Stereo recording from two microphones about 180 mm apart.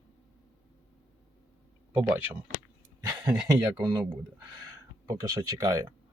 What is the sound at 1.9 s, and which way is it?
Speech, 10° right (ahead or behind).